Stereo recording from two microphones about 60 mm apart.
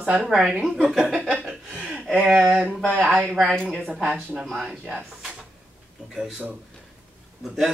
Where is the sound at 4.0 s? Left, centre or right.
Right.